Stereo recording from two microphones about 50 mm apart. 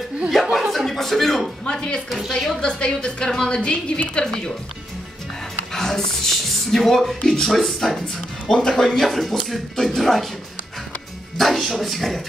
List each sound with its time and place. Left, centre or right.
0.3 s speech: centre
1.6 s a woman's voice: centre
2.0 s speech: centre
2.6 s a woman's voice: centre
5.7 s speech: centre
11.3 s speech: centre